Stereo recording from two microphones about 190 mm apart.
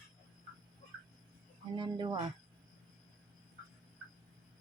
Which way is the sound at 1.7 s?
25° right (ahead or behind).